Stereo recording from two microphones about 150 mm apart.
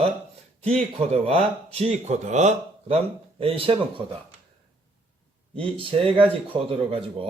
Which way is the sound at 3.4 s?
40° right (ahead or behind).